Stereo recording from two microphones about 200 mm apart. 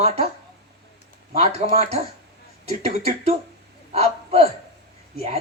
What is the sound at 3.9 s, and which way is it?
Speech, 30° right (ahead or behind).